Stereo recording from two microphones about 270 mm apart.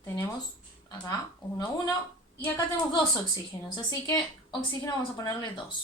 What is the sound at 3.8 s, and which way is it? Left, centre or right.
A woman's voice, centre.